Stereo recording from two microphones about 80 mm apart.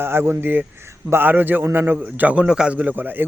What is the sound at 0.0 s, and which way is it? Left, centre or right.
Speech, right.